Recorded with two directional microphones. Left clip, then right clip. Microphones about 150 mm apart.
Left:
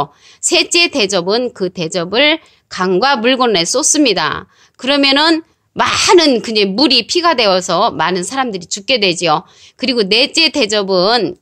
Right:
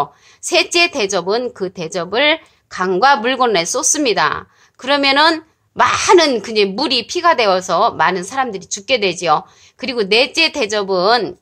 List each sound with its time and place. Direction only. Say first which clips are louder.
0.0 s a woman's voice: left 2 dB; 35° left (ahead or behind)